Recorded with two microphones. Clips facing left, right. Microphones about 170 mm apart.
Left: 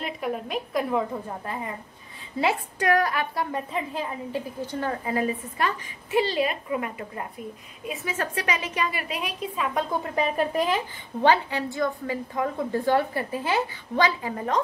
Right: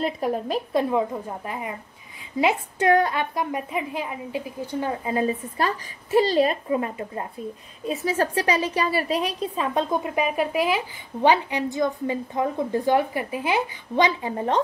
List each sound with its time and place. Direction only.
0.0 s a woman's voice: 35° right (ahead or behind)
0.8 s a woman's voice: 15° right (ahead or behind)
3.5 s a woman's voice: 10° right (ahead or behind); by 9.8 s 30° right (ahead or behind)
9.8 s a woman's voice: 15° right (ahead or behind)